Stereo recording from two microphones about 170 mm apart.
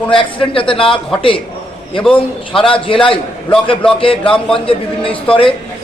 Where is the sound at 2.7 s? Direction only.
30° left (ahead or behind).